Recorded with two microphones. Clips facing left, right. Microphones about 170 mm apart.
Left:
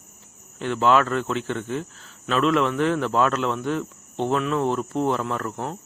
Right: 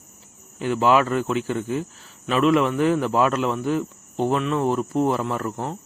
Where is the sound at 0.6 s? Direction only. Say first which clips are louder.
Right 1 dB; 10° right (ahead or behind).